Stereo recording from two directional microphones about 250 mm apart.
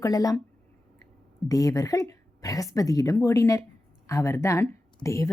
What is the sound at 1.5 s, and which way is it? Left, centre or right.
Speech, centre.